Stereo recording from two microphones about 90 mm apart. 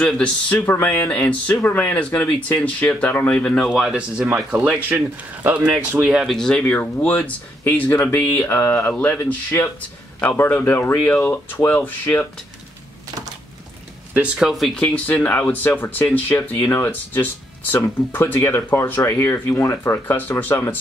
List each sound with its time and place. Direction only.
0.0 s speech: 10° left (ahead or behind)
0.6 s speech: 25° left (ahead or behind)
0.9 s speech: 15° left (ahead or behind)
1.6 s speech: 20° left (ahead or behind)
3.6 s speech: 5° right (ahead or behind)
6.3 s speech: 10° left (ahead or behind)
14.1 s speech: 15° right (ahead or behind)
14.5 s speech: centre (ahead or behind)
14.8 s speech: 15° left (ahead or behind)